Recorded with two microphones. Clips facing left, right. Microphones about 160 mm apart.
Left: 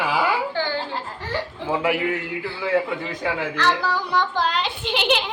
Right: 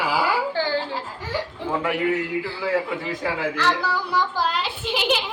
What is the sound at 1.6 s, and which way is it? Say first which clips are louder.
A man's voice: left 1 dB; 5° left (ahead or behind).